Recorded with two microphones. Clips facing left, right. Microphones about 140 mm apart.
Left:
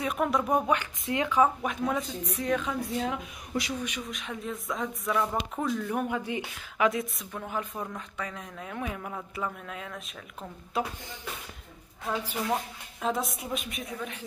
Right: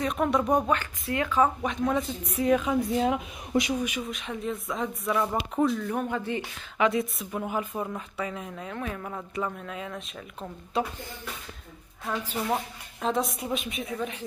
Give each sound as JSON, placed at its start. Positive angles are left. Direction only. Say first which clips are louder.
{"t": 0.0, "sound": "speech", "louder": "right 2 dB", "side_deg": 5}
{"t": 0.7, "sound": "speech", "louder": "even", "side_deg": 15}
{"t": 1.4, "sound": "speech", "louder": "right 1 dB", "side_deg": 5}
{"t": 2.3, "sound": "speech", "louder": "right 6 dB", "side_deg": -10}
{"t": 2.8, "sound": "speech", "louder": "right 6 dB", "side_deg": -20}
{"t": 3.8, "sound": "speech", "louder": "right 4 dB", "side_deg": -5}
{"t": 6.9, "sound": "speech", "louder": "right 4 dB", "side_deg": 0}
{"t": 8.7, "sound": "speech", "louder": "even", "side_deg": 10}
{"t": 13.0, "sound": "speech", "louder": "right 3 dB", "side_deg": 0}
{"t": 13.9, "sound": "speech", "louder": "right 6 dB", "side_deg": -10}